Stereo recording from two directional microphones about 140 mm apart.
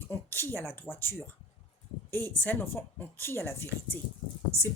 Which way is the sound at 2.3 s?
10° left (ahead or behind).